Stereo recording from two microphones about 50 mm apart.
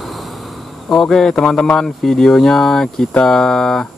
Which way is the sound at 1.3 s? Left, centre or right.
Left.